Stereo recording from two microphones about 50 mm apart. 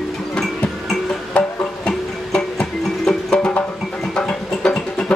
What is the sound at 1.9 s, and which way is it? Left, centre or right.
Music, centre.